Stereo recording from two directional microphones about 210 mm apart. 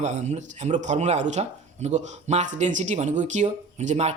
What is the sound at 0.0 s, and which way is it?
Speech, 35° right (ahead or behind).